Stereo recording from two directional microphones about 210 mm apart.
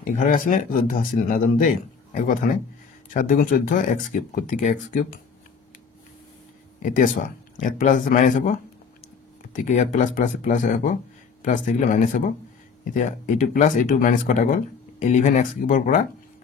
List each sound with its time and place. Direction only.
0.0 s speech: 40° left (ahead or behind)
6.8 s speech: 35° left (ahead or behind)